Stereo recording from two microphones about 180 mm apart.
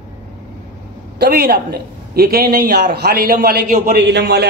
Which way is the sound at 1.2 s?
60° right (ahead or behind).